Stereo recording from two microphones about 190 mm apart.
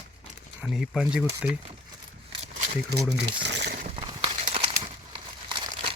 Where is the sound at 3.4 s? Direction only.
65° right (ahead or behind).